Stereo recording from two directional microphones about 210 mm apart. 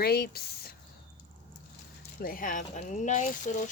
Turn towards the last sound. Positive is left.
turn(degrees=35)  # may be behind; listen again after turning